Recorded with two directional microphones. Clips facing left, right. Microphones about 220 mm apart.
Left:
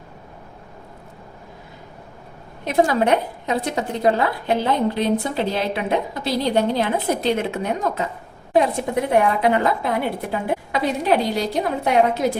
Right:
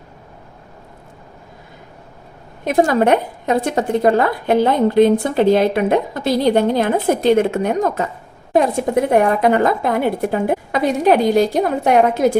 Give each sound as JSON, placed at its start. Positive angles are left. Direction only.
{"t": 2.6, "sound": "a woman's voice", "side_deg": -50}